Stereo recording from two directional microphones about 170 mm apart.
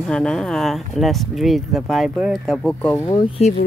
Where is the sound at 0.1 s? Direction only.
5° left (ahead or behind).